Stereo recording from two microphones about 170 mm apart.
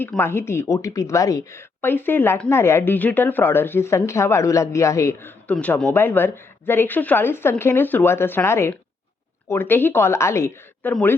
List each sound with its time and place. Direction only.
0.0 s speech: 10° left (ahead or behind)